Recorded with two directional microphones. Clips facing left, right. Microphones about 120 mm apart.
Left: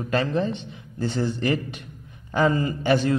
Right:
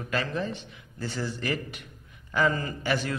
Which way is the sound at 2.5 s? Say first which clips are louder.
Left 7 dB; 15° left (ahead or behind).